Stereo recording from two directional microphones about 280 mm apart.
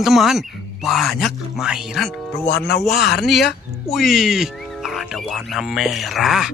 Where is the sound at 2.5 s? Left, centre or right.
Left.